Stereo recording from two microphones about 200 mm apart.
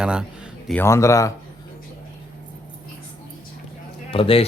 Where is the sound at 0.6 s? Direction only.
10° left (ahead or behind).